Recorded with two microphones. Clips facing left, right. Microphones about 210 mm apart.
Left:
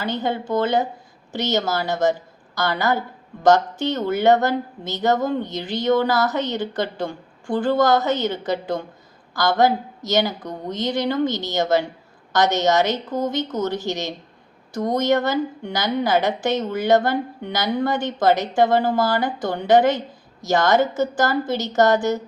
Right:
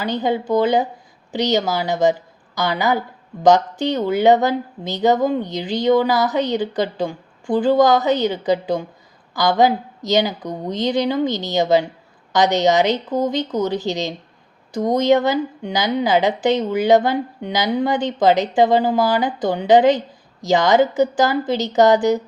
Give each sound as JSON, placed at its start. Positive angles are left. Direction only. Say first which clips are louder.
{"t": 0.0, "sound": "a woman's voice", "louder": "right 4 dB", "side_deg": -15}